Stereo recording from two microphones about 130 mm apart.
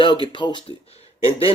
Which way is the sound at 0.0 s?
40° left (ahead or behind).